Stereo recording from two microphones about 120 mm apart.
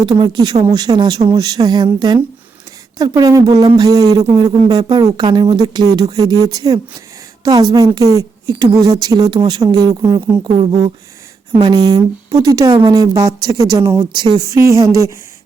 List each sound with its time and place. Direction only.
0.0 s speech: 40° right (ahead or behind)
14.1 s speech: 35° right (ahead or behind)
14.5 s speech: 25° right (ahead or behind)